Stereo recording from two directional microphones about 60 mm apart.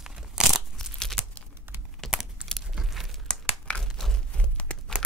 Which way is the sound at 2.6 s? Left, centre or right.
Centre.